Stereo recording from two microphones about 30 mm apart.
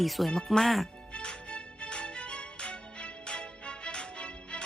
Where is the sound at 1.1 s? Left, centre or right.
Left.